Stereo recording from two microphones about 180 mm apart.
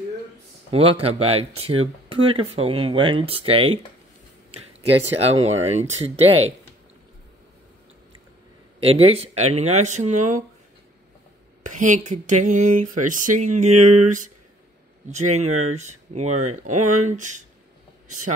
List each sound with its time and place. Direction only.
0.7 s speech: 35° right (ahead or behind)
5.2 s speech: 35° right (ahead or behind)
8.7 s speech: 35° right (ahead or behind)
11.6 s a sound: 45° right (ahead or behind)
15.0 s speech: 40° right (ahead or behind)